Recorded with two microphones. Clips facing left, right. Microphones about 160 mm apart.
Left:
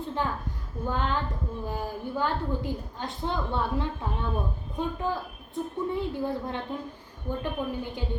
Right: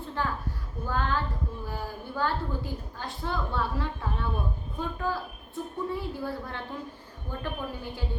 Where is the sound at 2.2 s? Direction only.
20° left (ahead or behind).